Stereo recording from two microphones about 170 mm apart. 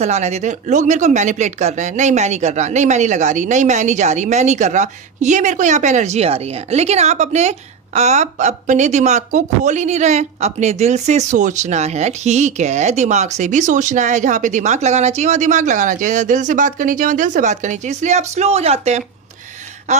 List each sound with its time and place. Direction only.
0.0 s speech: 40° right (ahead or behind)